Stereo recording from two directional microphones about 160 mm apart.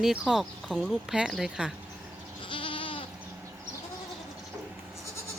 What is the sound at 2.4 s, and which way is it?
Goat, 35° left (ahead or behind).